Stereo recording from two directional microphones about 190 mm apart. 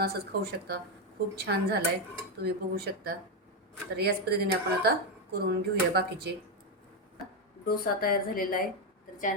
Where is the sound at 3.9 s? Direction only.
55° right (ahead or behind).